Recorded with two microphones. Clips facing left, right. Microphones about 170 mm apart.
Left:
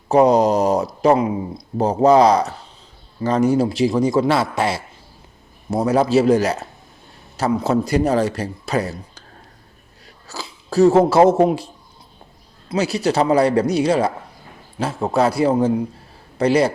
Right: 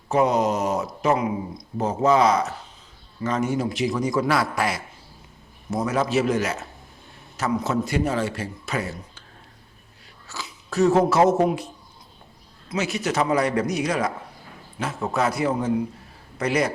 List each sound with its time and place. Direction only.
0.1 s speech: 35° left (ahead or behind)
10.2 s speech: 35° left (ahead or behind)